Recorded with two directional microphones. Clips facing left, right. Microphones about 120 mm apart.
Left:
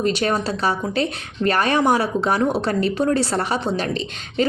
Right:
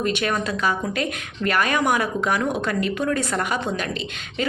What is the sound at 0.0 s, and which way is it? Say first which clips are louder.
A woman's voice: left 3 dB; 35° left (ahead or behind).